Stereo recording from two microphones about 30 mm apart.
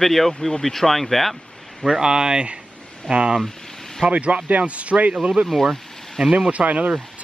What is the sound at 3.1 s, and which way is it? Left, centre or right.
Speech, right.